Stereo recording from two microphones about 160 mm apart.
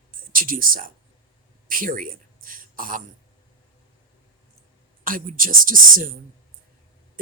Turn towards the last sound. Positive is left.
turn(degrees=-60)  # may be behind; listen again after turning